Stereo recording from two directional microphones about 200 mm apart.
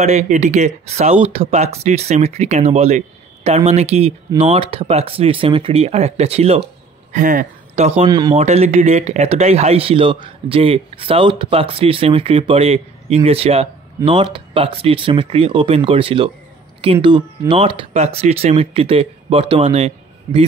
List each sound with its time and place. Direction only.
0.0 s speech: 35° right (ahead or behind)
8.0 s speech: 20° right (ahead or behind)
8.4 s speech: 35° right (ahead or behind)